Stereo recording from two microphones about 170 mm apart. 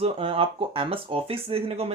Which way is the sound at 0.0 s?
35° right (ahead or behind).